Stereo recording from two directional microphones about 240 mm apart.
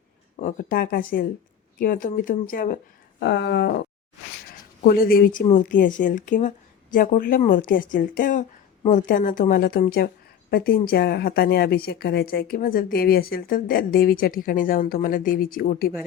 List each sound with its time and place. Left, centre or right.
0.3 s a woman's voice: left
3.2 s a sound: left
4.8 s a woman's voice: left